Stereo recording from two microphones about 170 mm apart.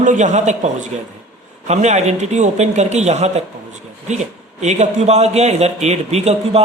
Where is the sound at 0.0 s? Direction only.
45° right (ahead or behind).